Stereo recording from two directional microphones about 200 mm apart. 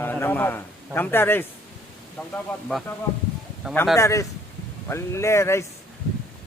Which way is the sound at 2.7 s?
5° left (ahead or behind).